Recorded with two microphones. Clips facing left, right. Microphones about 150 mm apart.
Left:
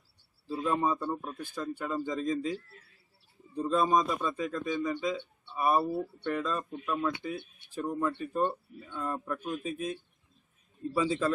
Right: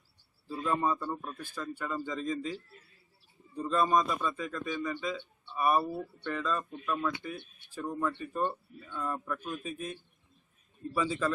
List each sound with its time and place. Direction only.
0.4 s a man's voice: 15° left (ahead or behind)
3.6 s speech: 15° left (ahead or behind)
10.9 s speech: 20° left (ahead or behind)